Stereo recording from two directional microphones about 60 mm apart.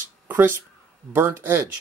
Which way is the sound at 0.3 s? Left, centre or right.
Right.